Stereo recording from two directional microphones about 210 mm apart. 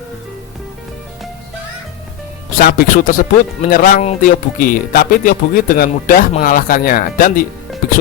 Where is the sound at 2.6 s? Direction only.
45° left (ahead or behind).